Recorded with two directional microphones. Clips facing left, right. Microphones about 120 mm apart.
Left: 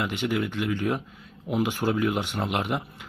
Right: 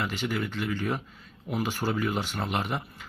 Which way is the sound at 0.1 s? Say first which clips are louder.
Left 4 dB; 15° left (ahead or behind).